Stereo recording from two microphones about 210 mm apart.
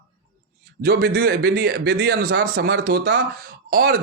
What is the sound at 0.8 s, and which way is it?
A man's voice, 50° right (ahead or behind).